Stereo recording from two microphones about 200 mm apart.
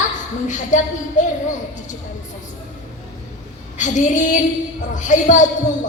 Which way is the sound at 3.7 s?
40° left (ahead or behind).